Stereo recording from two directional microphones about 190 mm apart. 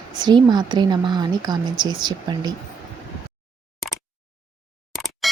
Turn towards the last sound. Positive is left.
turn(degrees=0)  # may be behind; listen again after turning